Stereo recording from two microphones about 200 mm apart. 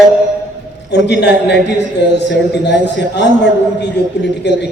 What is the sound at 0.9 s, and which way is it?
A man's voice, 60° left (ahead or behind).